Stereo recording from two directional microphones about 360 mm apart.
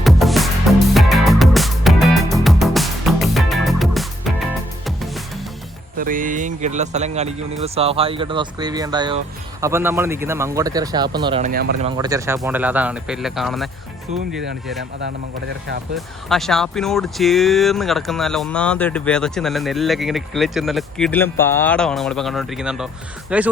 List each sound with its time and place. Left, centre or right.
0.0 s music: centre
6.0 s speech: right
11.9 s speech: centre
14.8 s speech: right
16.0 s speech: centre